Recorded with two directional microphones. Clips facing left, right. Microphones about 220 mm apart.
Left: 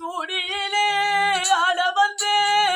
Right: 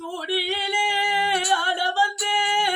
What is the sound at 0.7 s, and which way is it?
Singing, 10° right (ahead or behind).